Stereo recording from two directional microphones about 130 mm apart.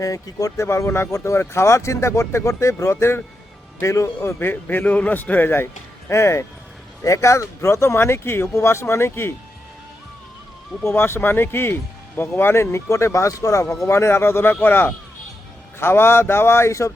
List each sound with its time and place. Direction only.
0.0 s speech: 25° left (ahead or behind)
10.8 s speech: 20° left (ahead or behind)